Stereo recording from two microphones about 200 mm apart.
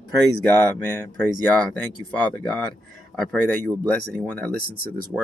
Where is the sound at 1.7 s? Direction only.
10° left (ahead or behind).